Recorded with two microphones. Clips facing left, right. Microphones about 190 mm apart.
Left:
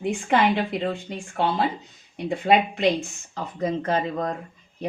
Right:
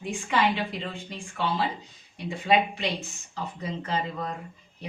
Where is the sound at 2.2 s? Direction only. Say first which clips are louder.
Left 4 dB; 55° left (ahead or behind).